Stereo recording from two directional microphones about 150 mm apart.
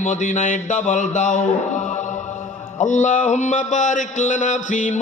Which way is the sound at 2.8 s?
55° left (ahead or behind).